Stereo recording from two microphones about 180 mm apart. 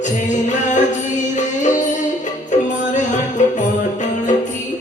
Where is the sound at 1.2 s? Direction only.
40° left (ahead or behind).